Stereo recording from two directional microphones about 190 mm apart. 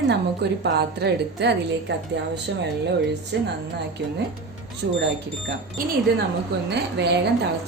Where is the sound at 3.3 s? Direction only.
70° right (ahead or behind).